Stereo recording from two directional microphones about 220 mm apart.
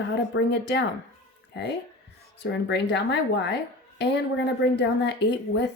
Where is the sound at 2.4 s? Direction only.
50° left (ahead or behind).